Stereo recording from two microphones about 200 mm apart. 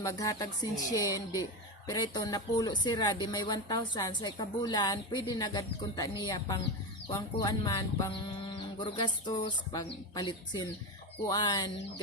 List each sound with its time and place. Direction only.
0.0 s speech: 15° left (ahead or behind)